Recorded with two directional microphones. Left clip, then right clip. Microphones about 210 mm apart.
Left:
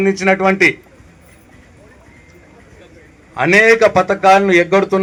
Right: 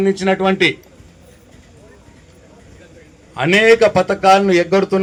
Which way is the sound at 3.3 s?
40° right (ahead or behind).